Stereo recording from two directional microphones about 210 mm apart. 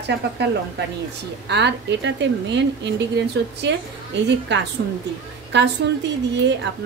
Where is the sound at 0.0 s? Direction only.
55° right (ahead or behind).